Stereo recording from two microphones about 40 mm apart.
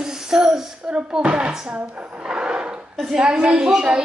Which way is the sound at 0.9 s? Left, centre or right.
Right.